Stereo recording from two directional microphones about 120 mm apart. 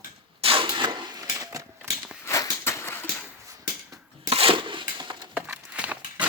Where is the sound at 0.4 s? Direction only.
50° right (ahead or behind); by 1.6 s 35° right (ahead or behind).